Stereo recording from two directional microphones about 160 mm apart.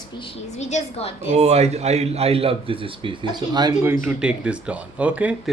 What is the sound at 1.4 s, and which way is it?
A man's voice, 40° right (ahead or behind).